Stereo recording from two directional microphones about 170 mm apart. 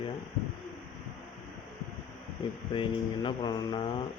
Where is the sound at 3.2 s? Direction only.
25° left (ahead or behind).